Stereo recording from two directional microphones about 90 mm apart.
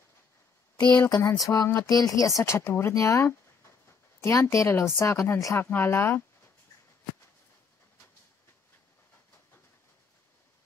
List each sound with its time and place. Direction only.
1.1 s speech: 40° left (ahead or behind); by 6.2 s 25° left (ahead or behind)